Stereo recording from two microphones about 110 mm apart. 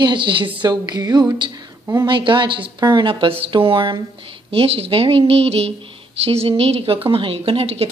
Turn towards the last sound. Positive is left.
turn(degrees=-60)  # may be behind; listen again after turning